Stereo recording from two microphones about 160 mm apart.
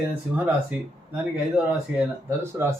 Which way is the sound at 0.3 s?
10° right (ahead or behind).